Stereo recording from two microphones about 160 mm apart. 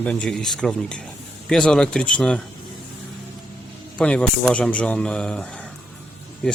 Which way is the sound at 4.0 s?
5° left (ahead or behind).